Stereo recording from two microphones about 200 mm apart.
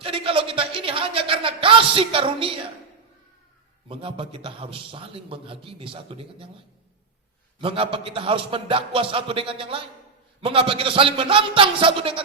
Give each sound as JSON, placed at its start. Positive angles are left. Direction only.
{"t": 0.0, "sound": "a sound", "side_deg": -25}
{"t": 3.8, "sound": "a man's voice", "side_deg": -30}
{"t": 7.6, "sound": "a man's voice", "side_deg": -25}